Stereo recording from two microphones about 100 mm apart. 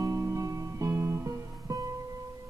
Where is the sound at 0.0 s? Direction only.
35° right (ahead or behind).